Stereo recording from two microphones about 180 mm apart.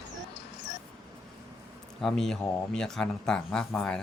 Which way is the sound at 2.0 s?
5° left (ahead or behind).